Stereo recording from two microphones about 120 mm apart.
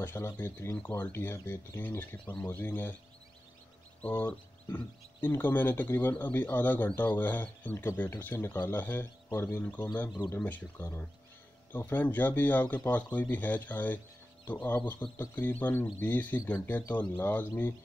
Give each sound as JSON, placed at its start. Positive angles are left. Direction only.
{"t": 0.0, "sound": "speech", "side_deg": 20}
{"t": 4.0, "sound": "speech", "side_deg": 10}